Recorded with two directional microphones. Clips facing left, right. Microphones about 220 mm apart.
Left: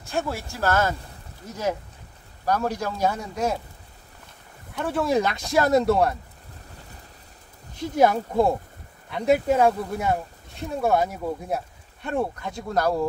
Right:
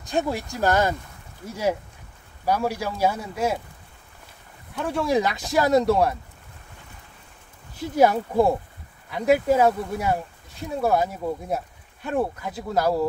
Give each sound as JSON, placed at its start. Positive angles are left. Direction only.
{"t": 0.0, "sound": "a man's voice", "side_deg": -15}
{"t": 4.7, "sound": "speech", "side_deg": 0}
{"t": 8.0, "sound": "speech", "side_deg": -5}